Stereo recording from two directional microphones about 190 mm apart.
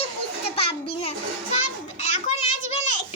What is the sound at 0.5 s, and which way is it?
Speech, 30° left (ahead or behind).